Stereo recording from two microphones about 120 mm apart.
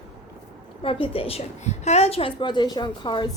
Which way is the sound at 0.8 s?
50° left (ahead or behind).